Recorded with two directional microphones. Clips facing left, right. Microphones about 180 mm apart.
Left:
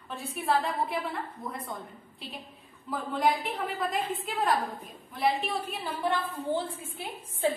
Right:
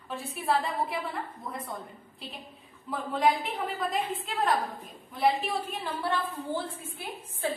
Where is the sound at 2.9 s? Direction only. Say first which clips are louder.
Right 1 dB; centre (ahead or behind).